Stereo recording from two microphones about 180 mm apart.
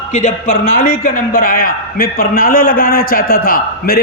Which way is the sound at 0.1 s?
45° left (ahead or behind).